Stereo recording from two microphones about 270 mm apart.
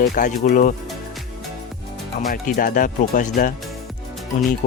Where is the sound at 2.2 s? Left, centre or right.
Left.